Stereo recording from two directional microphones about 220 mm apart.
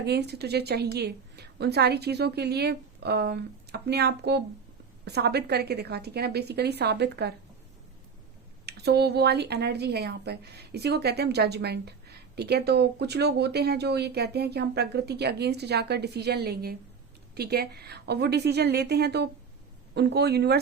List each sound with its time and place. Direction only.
0.0 s a woman's voice: 50° right (ahead or behind)
8.6 s a woman's voice: 50° right (ahead or behind)